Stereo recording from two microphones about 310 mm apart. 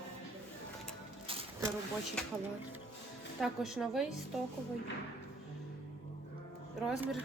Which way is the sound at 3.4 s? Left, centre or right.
Centre.